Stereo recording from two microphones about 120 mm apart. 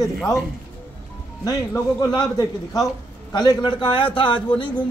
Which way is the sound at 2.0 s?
35° left (ahead or behind).